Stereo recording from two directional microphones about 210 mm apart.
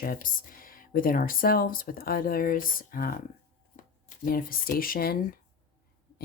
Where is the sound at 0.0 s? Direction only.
45° left (ahead or behind).